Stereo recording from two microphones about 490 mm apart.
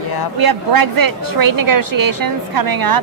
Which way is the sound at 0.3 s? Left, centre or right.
Right.